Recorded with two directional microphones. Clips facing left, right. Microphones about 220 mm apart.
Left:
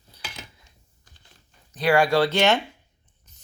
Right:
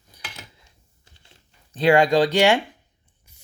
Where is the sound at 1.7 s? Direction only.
25° right (ahead or behind).